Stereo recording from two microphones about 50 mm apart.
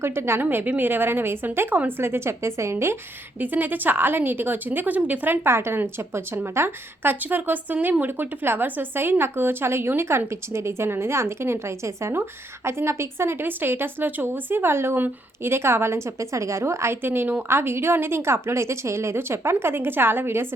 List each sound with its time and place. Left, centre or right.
0.0 s a woman's voice: right
0.8 s a woman's voice: right
3.4 s a woman's voice: right
5.5 s a woman's voice: right
12.6 s a woman's voice: right
13.4 s a woman's voice: right
17.0 s a woman's voice: right